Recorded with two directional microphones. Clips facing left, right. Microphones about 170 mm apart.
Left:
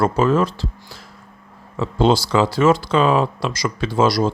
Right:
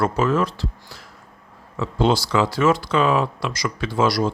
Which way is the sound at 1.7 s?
30° left (ahead or behind).